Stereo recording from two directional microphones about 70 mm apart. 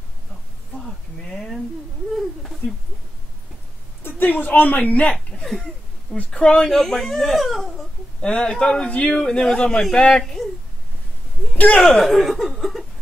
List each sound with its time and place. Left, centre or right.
0.7 s a sound: centre
4.0 s a woman's voice: left
5.1 s laughter: centre
6.1 s speech: centre
7.4 s baby cry: centre
8.2 s speech: centre
11.7 s speech: centre